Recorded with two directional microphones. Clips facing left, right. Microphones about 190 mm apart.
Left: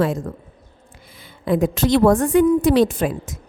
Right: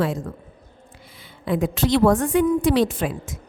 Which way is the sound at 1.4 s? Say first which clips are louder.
Left 3 dB; 45° left (ahead or behind).